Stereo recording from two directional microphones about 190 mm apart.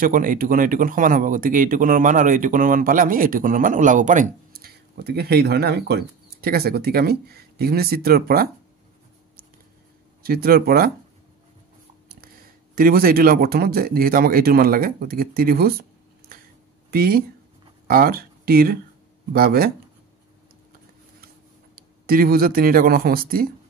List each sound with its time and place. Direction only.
0.0 s speech: 45° right (ahead or behind)
10.2 s speech: 50° right (ahead or behind)
12.7 s speech: 50° right (ahead or behind)
16.9 s speech: 50° right (ahead or behind)
21.7 s speech: 50° right (ahead or behind)